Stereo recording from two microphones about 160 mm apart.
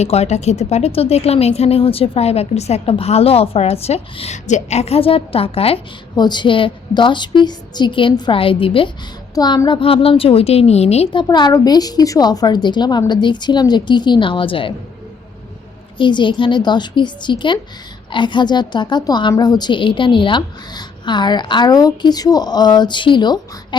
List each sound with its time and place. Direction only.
0.0 s a woman's voice: 40° left (ahead or behind)
9.3 s a woman's voice: 25° left (ahead or behind)
16.0 s a woman's voice: 30° left (ahead or behind)